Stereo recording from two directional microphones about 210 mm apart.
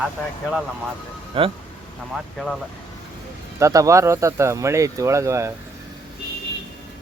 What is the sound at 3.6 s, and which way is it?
Speech, 15° right (ahead or behind).